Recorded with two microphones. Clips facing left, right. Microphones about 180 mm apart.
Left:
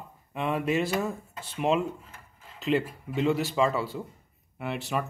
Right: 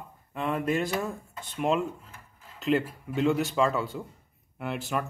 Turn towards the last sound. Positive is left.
turn(degrees=0)  # may be behind; listen again after turning